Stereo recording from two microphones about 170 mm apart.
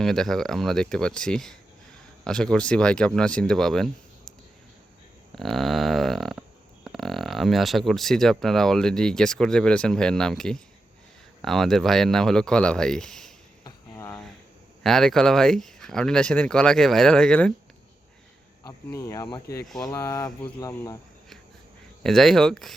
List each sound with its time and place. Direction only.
0.0 s speech: centre (ahead or behind)
5.3 s speech: centre (ahead or behind)
13.7 s a sound: 15° left (ahead or behind)
14.8 s speech: centre (ahead or behind)
18.6 s speech: 15° left (ahead or behind)
19.6 s speech: centre (ahead or behind)
19.9 s speech: 15° left (ahead or behind)
22.0 s speech: 5° left (ahead or behind)